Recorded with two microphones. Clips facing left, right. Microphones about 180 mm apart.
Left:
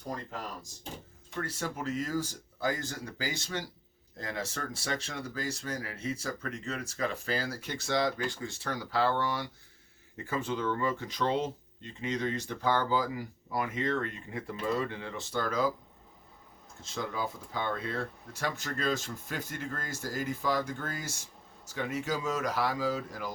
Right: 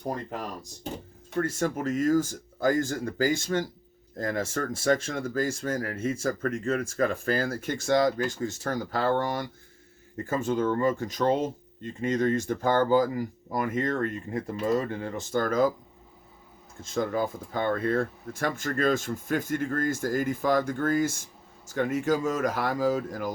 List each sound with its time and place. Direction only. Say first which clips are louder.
0.0 s speech: right 6 dB; 65° right (ahead or behind)
1.4 s speech: right 8 dB; 45° right (ahead or behind)
16.8 s speech: right 8 dB; 50° right (ahead or behind)